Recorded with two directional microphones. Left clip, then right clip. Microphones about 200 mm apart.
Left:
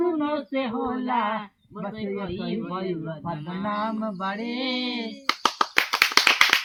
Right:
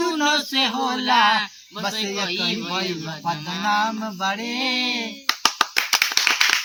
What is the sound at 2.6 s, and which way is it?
Speech, 20° right (ahead or behind).